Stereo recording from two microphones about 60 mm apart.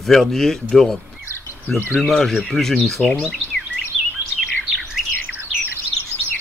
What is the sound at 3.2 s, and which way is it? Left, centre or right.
Bird, centre.